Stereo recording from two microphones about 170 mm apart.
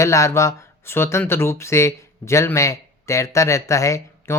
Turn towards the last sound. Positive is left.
turn(degrees=15)  # may be behind; listen again after turning